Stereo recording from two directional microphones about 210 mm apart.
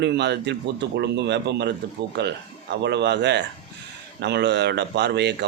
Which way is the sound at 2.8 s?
55° right (ahead or behind).